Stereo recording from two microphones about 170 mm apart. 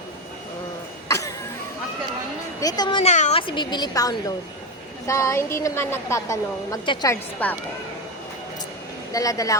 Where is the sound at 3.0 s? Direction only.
40° left (ahead or behind); by 7.1 s 25° left (ahead or behind).